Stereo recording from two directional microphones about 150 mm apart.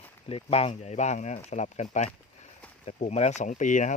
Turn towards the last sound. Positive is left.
turn(degrees=55)  # may be behind; listen again after turning